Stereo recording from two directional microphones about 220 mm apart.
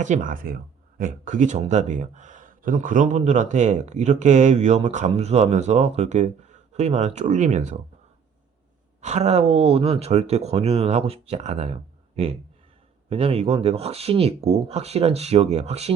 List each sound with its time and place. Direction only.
0.0 s speech: 35° right (ahead or behind)
9.0 s speech: 30° right (ahead or behind)